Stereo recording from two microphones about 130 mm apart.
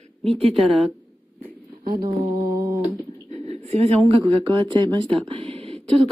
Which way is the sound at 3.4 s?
55° right (ahead or behind).